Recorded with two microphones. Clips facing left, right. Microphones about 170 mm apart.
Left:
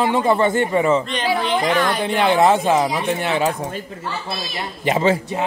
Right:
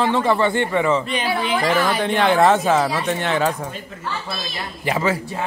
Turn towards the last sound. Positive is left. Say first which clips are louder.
# left 4 dB
turn(degrees=25)  # may be behind; listen again after turning